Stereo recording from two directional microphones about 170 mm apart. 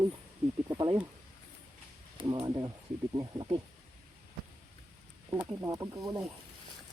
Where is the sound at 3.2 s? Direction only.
25° right (ahead or behind).